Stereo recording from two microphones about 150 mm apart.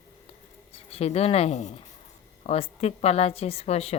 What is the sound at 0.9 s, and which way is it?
Speech, 45° left (ahead or behind).